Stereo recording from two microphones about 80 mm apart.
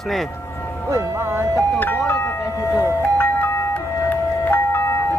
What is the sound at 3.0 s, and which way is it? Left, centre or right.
Music, left.